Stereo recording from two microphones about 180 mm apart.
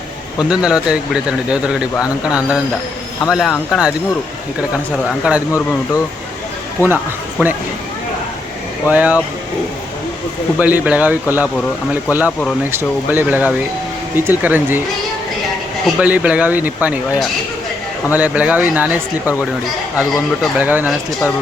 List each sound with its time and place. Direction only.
0.4 s speech: 5° right (ahead or behind)
5.0 s speech: 5° right (ahead or behind)
6.8 s speech: 10° right (ahead or behind)
8.9 s speech: 10° right (ahead or behind)
10.6 s speech: 10° right (ahead or behind)
12.7 s speech: 10° right (ahead or behind)
16.0 s speech: 10° right (ahead or behind)
19.2 s speech: 15° left (ahead or behind)
20.4 s speech: 10° right (ahead or behind)